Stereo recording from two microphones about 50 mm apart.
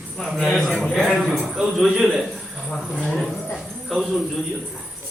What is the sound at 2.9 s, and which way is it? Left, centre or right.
Speech, centre.